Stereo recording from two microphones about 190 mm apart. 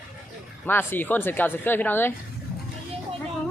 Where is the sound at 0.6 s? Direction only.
10° left (ahead or behind).